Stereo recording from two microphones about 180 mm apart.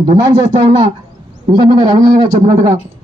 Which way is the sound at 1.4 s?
25° right (ahead or behind).